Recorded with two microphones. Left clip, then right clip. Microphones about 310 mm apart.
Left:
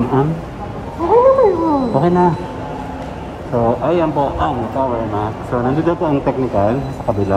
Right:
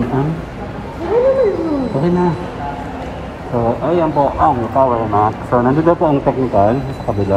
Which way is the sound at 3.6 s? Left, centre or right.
Centre.